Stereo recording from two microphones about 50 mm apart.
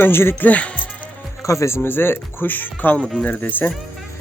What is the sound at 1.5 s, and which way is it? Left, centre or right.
Speech, left.